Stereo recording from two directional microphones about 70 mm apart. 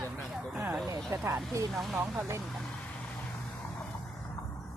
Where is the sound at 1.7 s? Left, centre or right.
Centre.